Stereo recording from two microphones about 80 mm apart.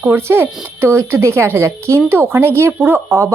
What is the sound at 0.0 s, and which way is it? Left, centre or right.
A woman's voice, right.